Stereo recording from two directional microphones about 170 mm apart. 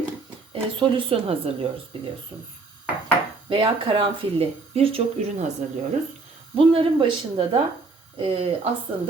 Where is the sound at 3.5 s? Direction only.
30° right (ahead or behind).